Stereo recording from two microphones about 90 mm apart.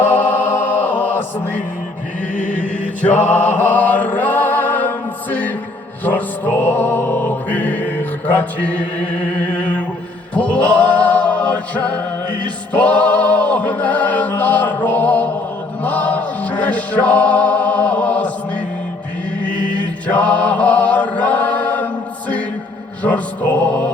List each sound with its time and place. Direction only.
0.3 s music: 20° left (ahead or behind)
3.2 s a sound: 20° left (ahead or behind)
6.1 s music: 20° left (ahead or behind)
20.1 s chant: 15° left (ahead or behind)
23.0 s music: 15° left (ahead or behind)